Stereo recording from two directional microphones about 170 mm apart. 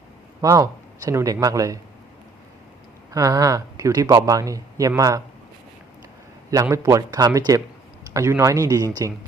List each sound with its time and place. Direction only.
0.4 s speech: 20° right (ahead or behind)
3.1 s speech: 20° right (ahead or behind)
6.5 s speech: 20° right (ahead or behind)